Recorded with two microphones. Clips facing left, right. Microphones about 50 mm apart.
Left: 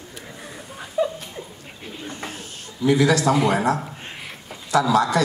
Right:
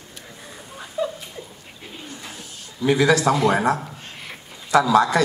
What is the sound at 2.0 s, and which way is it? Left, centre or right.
Snake, left.